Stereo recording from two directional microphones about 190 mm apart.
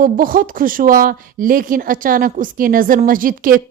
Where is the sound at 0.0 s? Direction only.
45° right (ahead or behind).